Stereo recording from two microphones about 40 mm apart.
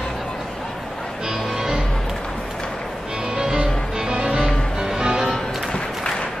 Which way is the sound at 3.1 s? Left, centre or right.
Centre.